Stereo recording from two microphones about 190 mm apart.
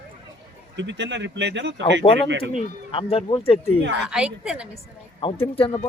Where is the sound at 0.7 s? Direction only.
70° right (ahead or behind).